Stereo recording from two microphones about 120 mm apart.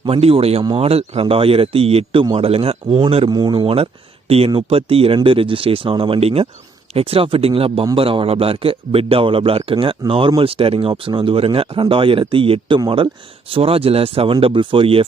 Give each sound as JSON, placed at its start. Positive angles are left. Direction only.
{"t": 0.0, "sound": "speech", "side_deg": -50}
{"t": 3.2, "sound": "speech", "side_deg": -35}